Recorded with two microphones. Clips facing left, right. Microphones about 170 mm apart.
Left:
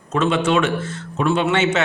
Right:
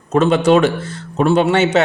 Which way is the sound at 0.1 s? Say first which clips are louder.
Right 6 dB; 40° right (ahead or behind).